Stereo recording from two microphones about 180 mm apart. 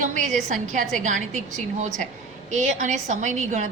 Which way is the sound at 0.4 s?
45° right (ahead or behind).